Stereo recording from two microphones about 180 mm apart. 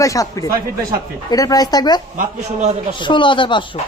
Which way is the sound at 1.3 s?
20° left (ahead or behind).